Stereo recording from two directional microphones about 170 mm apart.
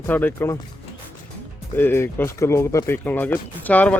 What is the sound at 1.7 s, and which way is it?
Speech, 15° left (ahead or behind).